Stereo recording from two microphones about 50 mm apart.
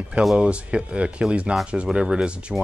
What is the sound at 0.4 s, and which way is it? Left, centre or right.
Speech, right.